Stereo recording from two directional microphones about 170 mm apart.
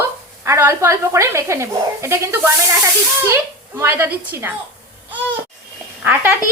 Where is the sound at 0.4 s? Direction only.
15° right (ahead or behind).